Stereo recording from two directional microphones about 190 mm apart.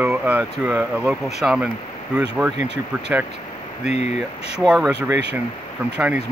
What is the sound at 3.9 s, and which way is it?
Speech, 35° left (ahead or behind).